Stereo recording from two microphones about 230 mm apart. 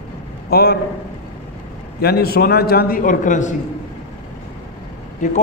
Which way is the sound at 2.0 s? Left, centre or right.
Left.